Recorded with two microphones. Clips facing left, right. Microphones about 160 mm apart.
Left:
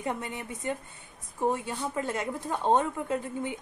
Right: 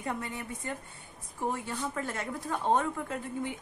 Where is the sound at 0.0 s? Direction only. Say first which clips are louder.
Left 2 dB; 20° left (ahead or behind).